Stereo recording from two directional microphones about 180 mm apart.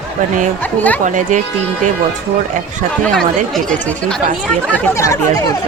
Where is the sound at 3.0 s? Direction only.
5° left (ahead or behind).